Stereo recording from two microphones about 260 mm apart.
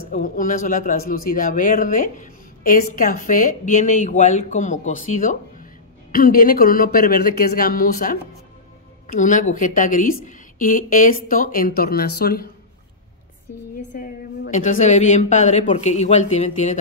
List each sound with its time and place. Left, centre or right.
0.1 s speech: left
13.9 s speech: left